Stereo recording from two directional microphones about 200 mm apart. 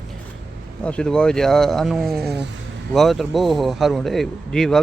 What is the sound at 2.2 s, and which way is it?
Speech, 55° right (ahead or behind).